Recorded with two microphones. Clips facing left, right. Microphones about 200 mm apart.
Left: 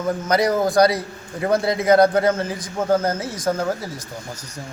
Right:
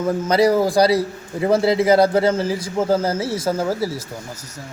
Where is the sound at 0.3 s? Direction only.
30° right (ahead or behind).